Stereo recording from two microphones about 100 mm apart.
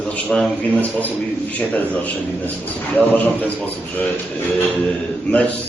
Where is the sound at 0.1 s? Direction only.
15° left (ahead or behind).